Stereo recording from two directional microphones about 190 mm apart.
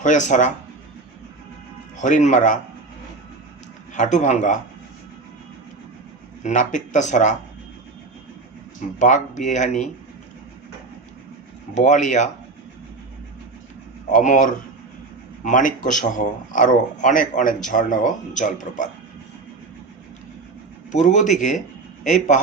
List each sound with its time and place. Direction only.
0.0 s speech: 40° left (ahead or behind)
2.0 s speech: 40° left (ahead or behind)
3.9 s speech: 40° left (ahead or behind)
6.4 s speech: 40° left (ahead or behind)
9.0 s speech: 40° left (ahead or behind)
11.7 s speech: 40° left (ahead or behind)
14.1 s speech: 40° left (ahead or behind)
20.9 s speech: 40° left (ahead or behind)